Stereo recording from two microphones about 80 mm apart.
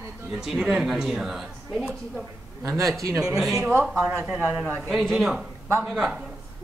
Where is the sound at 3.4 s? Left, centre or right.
Centre.